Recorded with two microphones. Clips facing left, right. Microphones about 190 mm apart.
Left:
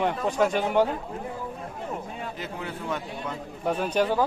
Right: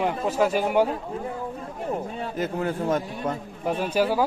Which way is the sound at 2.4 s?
45° right (ahead or behind).